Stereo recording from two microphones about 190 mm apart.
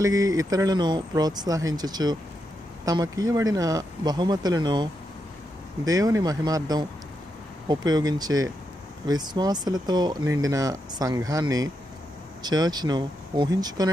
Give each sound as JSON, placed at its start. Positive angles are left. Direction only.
{"t": 0.0, "sound": "speech", "side_deg": -15}
{"t": 5.9, "sound": "speech", "side_deg": -20}